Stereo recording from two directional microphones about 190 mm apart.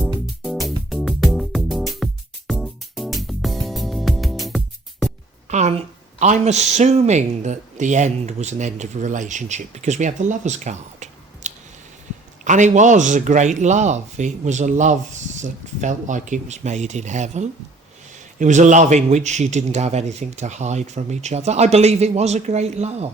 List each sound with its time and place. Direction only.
0.4 s music: centre (ahead or behind)
5.5 s speech: 35° right (ahead or behind)